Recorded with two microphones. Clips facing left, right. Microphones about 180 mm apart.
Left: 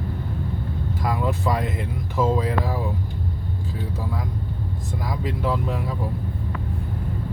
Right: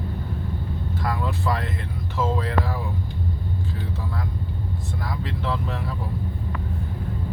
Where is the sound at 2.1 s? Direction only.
15° left (ahead or behind).